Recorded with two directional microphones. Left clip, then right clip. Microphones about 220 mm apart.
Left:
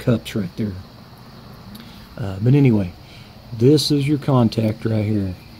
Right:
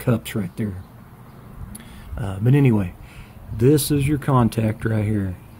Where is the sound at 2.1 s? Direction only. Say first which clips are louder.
Left 2 dB; 5° right (ahead or behind).